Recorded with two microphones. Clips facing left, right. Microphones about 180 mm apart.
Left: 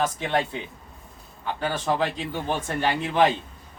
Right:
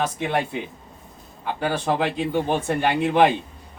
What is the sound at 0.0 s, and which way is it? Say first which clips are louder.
Speech: right 1 dB; 10° right (ahead or behind).